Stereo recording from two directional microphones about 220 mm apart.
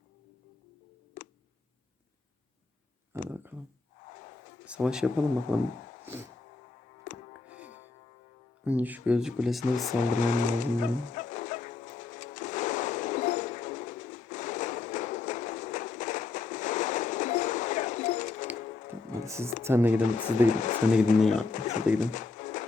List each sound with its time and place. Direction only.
1.2 s tick: 35° left (ahead or behind)
3.2 s speech: 10° right (ahead or behind)
4.6 s speech: 5° right (ahead or behind)
7.1 s music: 35° left (ahead or behind)
7.4 s music: 5° right (ahead or behind)
8.6 s speech: 5° right (ahead or behind)
9.8 s music: 35° left (ahead or behind)
19.2 s music: 15° right (ahead or behind)
19.6 s speech: 10° right (ahead or behind)
20.1 s speech: 35° left (ahead or behind)
21.2 s speech: centre (ahead or behind)
21.5 s a sound: 35° left (ahead or behind)
22.0 s pigeon: 35° left (ahead or behind)